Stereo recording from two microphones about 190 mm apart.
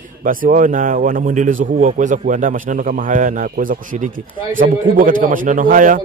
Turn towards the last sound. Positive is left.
turn(degrees=-45)  # may be behind; listen again after turning